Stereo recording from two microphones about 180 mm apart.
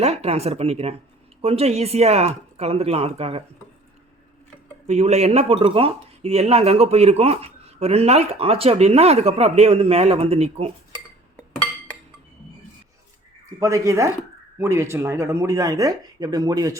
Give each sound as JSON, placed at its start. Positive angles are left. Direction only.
{"t": 0.0, "sound": "speech", "side_deg": -35}
{"t": 4.9, "sound": "speech", "side_deg": -35}
{"t": 13.6, "sound": "speech", "side_deg": -15}